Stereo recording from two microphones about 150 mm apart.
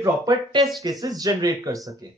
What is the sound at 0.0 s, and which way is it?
Speech, 25° right (ahead or behind).